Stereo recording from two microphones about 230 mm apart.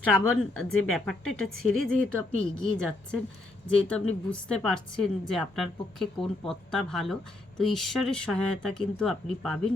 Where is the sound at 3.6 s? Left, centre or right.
Centre.